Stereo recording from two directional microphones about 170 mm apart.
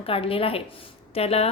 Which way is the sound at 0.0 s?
35° left (ahead or behind).